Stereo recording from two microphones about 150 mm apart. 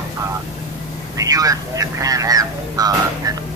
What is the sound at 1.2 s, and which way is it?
Speech, 25° right (ahead or behind).